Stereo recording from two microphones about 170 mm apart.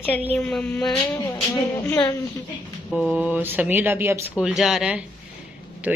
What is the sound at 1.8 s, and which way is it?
Speech, 10° left (ahead or behind).